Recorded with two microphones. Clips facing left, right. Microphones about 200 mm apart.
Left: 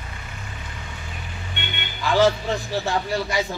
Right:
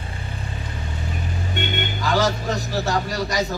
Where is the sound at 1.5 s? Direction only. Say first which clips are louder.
Right 9 dB; 40° right (ahead or behind).